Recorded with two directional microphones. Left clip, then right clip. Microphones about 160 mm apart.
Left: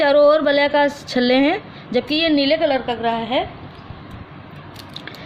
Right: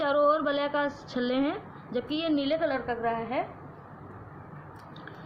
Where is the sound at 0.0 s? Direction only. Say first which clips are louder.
Left 11 dB; 40° left (ahead or behind).